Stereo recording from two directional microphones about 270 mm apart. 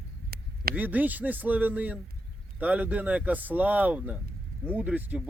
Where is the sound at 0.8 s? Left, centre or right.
Centre.